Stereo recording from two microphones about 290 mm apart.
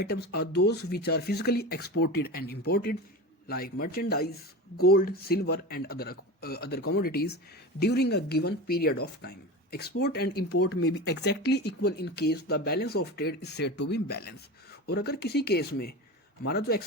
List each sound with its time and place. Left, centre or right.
0.0 s speech: left